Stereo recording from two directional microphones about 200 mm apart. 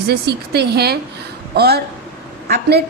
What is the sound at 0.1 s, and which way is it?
A woman's voice, 55° right (ahead or behind).